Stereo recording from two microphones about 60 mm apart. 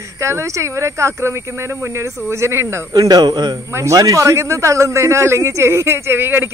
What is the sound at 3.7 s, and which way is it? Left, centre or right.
A man's voice, right.